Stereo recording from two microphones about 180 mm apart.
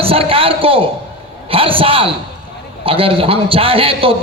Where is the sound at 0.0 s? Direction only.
30° right (ahead or behind).